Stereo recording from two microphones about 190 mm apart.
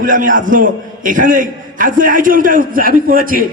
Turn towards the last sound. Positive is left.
turn(degrees=-45)  # may be behind; listen again after turning